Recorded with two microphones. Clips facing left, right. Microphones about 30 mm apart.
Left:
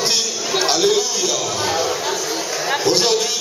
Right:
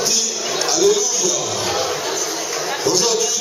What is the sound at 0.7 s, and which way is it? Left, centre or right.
Speech, left.